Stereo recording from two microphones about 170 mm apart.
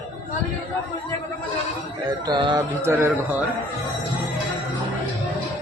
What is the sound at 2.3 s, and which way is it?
Speech, 25° right (ahead or behind).